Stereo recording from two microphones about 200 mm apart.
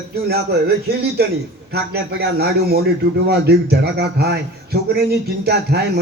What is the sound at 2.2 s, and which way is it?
A man's voice, 55° right (ahead or behind).